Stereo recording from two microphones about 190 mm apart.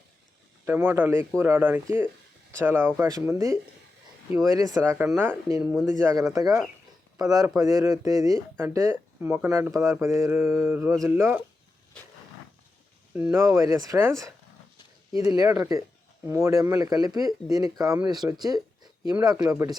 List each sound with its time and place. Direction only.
0.6 s speech: 10° right (ahead or behind)
13.1 s speech: 10° right (ahead or behind)